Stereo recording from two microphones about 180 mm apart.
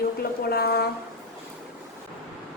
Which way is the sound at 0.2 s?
60° left (ahead or behind).